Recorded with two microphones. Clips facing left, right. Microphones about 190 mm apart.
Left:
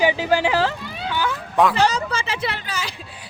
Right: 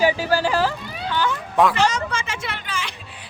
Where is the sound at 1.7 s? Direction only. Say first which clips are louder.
Left 1 dB; 35° left (ahead or behind).